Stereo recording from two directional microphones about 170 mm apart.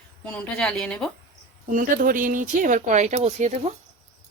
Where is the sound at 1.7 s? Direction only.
55° right (ahead or behind).